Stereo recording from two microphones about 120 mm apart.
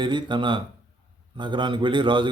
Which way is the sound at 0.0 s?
40° right (ahead or behind).